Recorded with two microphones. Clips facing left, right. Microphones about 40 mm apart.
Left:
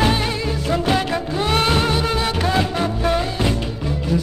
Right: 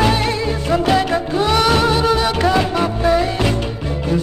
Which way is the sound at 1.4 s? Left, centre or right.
Right.